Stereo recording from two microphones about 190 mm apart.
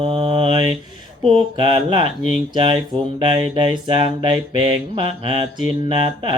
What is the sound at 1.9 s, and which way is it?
Mantra, 40° left (ahead or behind).